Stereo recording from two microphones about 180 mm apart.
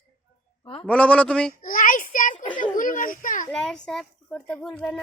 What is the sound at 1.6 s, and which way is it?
A child's voice, 50° left (ahead or behind).